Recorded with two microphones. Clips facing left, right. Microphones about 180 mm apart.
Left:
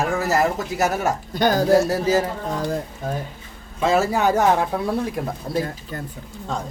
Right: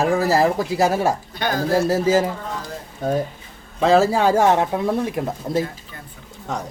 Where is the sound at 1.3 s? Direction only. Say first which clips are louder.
Left 5 dB; 45° left (ahead or behind).